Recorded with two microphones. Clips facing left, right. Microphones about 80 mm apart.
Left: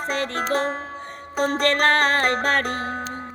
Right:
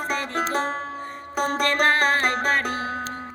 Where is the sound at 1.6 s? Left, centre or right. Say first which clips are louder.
Left 1 dB; left.